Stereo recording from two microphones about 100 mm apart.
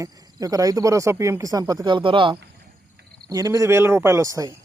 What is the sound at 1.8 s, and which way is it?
Speech, 55° right (ahead or behind).